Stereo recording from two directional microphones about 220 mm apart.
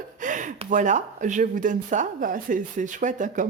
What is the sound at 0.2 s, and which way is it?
Speech, 35° right (ahead or behind).